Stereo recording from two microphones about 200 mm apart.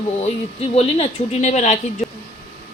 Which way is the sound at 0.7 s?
35° left (ahead or behind).